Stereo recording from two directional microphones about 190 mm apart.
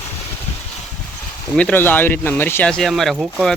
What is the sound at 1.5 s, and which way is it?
Speech, 10° left (ahead or behind).